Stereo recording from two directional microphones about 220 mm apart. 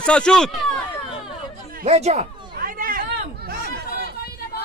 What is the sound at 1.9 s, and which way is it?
Speech, 30° right (ahead or behind).